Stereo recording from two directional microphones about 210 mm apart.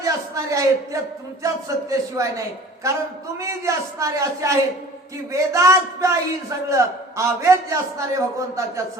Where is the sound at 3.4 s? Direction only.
15° right (ahead or behind).